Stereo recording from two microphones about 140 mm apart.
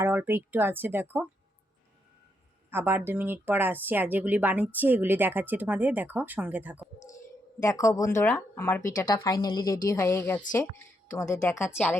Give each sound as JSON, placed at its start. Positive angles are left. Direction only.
{"t": 0.0, "sound": "speech", "side_deg": -15}
{"t": 2.6, "sound": "speech", "side_deg": -15}
{"t": 7.6, "sound": "speech", "side_deg": 20}
{"t": 8.3, "sound": "speech", "side_deg": 10}
{"t": 8.8, "sound": "speech", "side_deg": 30}
{"t": 9.9, "sound": "speech", "side_deg": 20}